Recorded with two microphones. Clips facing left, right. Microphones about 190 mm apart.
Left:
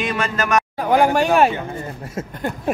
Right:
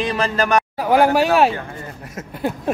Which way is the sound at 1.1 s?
5° right (ahead or behind).